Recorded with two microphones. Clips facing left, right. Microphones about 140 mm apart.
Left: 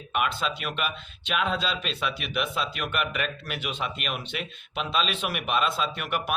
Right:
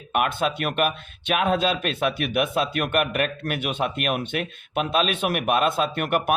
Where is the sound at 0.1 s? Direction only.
55° right (ahead or behind).